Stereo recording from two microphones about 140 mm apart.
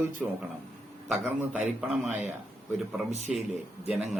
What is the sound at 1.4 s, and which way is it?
A man's voice, 10° right (ahead or behind).